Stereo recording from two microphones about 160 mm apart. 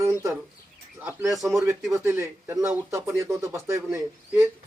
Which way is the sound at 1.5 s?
20° right (ahead or behind).